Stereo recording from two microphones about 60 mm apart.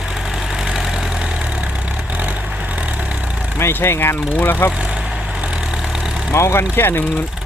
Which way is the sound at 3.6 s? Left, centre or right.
Left.